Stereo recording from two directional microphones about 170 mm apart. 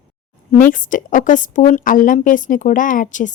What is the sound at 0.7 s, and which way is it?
A woman's voice, 50° left (ahead or behind).